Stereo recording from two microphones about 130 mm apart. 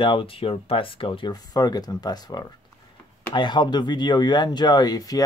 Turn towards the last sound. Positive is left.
turn(degrees=30)  # may be behind; listen again after turning